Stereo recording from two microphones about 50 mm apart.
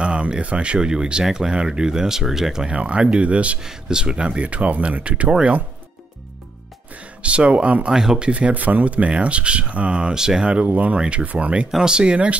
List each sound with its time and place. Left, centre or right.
0.0 s speech: centre
7.2 s speech: right
7.9 s speech: centre
8.3 s speech: right